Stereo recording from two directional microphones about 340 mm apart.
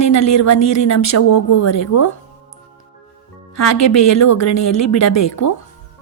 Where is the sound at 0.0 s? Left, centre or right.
Left.